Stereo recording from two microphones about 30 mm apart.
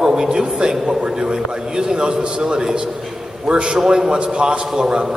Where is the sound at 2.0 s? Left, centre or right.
Right.